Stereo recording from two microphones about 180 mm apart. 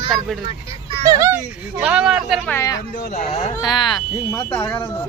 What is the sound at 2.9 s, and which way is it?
Speech, 50° left (ahead or behind).